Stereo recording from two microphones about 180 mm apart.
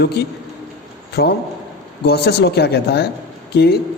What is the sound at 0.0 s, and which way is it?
A man's voice, 65° left (ahead or behind).